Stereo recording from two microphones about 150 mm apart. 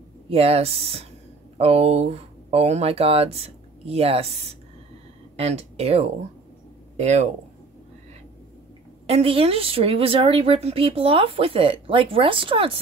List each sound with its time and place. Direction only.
0.3 s a woman's voice: 40° right (ahead or behind)
5.4 s speech: 45° right (ahead or behind)
9.0 s a woman's voice: 40° right (ahead or behind)